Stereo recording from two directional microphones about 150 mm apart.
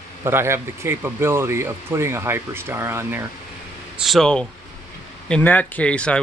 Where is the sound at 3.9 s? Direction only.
Centre (ahead or behind).